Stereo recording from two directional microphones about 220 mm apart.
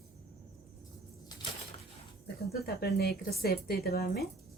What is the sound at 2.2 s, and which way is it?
Speech, 45° left (ahead or behind).